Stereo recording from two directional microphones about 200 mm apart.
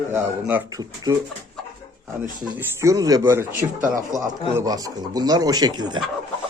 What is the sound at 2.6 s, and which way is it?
Speech, 15° right (ahead or behind).